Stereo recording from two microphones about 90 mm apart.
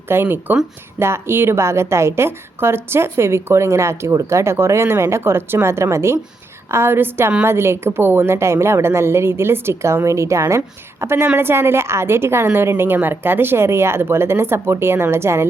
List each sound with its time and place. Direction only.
0.1 s a woman's voice: 25° right (ahead or behind)